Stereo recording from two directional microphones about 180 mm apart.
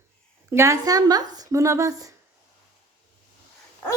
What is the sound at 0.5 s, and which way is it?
Speech, 15° right (ahead or behind).